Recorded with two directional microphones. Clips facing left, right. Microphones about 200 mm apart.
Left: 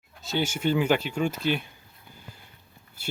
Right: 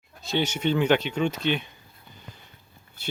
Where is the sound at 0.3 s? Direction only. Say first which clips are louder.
Right 1 dB; 5° left (ahead or behind).